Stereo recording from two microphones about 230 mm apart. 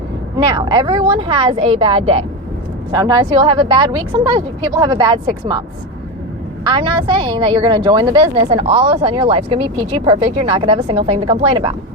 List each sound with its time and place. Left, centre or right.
0.4 s speech: centre
6.7 s speech: centre